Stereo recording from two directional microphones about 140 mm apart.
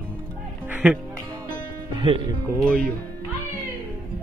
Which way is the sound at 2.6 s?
10° left (ahead or behind).